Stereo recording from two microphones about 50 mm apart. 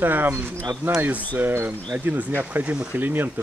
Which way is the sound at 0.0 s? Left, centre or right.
Right.